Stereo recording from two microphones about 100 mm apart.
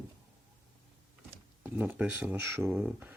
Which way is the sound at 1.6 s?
20° right (ahead or behind).